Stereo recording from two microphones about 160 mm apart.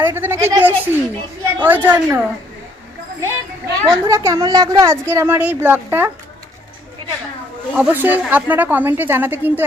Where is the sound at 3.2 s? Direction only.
15° right (ahead or behind).